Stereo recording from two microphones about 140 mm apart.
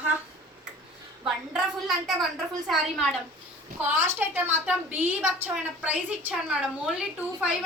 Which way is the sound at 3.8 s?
15° right (ahead or behind).